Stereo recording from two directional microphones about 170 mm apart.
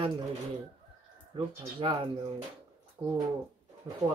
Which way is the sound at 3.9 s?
30° right (ahead or behind).